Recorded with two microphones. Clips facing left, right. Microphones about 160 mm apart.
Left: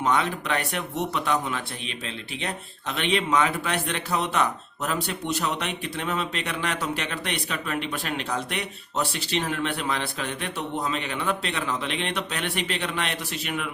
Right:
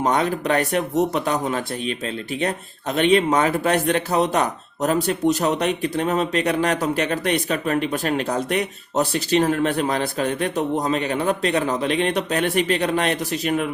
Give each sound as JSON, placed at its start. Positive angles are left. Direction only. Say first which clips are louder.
{"t": 0.0, "sound": "speech", "louder": "right 4 dB", "side_deg": -40}